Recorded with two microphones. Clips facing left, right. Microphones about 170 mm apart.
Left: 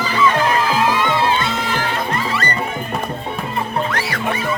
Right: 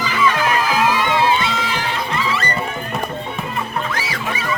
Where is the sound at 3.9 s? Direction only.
60° left (ahead or behind).